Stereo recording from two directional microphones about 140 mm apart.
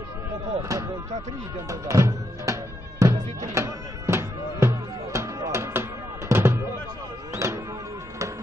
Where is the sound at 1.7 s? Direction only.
25° right (ahead or behind).